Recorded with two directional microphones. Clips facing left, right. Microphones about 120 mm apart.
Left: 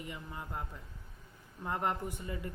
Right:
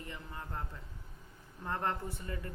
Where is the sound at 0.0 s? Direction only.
15° left (ahead or behind).